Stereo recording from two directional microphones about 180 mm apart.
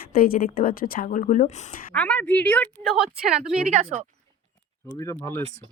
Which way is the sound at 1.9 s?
5° left (ahead or behind).